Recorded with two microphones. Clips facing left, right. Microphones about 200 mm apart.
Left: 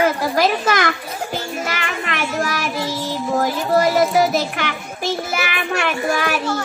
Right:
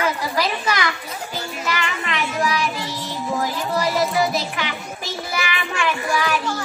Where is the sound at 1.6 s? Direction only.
50° left (ahead or behind).